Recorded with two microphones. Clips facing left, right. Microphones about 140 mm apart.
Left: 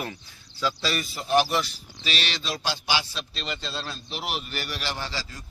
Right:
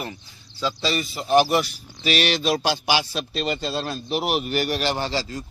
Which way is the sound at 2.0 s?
55° right (ahead or behind).